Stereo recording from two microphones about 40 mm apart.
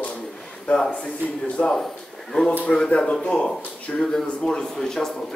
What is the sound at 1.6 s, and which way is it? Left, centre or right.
Speech, centre.